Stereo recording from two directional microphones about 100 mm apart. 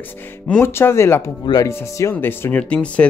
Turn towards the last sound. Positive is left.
turn(degrees=15)  # may be behind; listen again after turning